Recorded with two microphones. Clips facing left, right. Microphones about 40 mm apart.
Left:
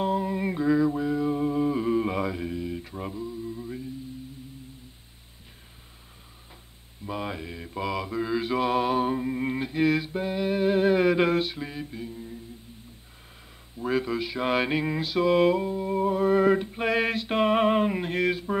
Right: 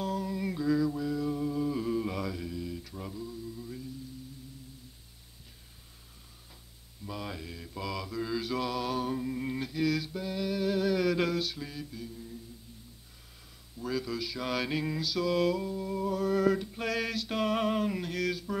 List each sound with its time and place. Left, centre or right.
0.0 s a sound: left
7.1 s mantra: left
13.7 s mantra: left